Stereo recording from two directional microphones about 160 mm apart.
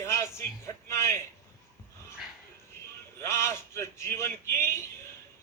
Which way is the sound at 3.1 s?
15° left (ahead or behind).